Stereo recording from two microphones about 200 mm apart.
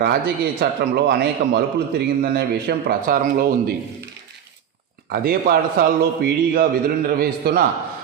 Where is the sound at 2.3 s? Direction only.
50° right (ahead or behind).